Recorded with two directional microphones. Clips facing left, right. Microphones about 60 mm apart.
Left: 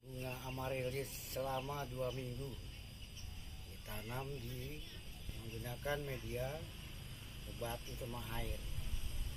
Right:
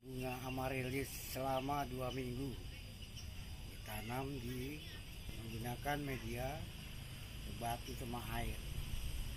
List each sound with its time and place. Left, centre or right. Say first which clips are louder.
0.2 s speech: right 2 dB; right
3.9 s speech: right 2 dB; right
5.6 s speech: even; centre
7.7 s speech: right 1 dB; centre